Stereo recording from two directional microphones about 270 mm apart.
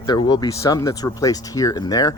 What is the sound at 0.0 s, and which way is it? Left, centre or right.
Speech, centre.